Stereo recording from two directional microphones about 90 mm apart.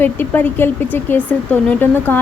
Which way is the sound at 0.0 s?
20° left (ahead or behind).